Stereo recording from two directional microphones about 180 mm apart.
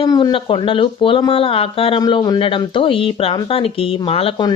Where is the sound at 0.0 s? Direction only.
25° left (ahead or behind).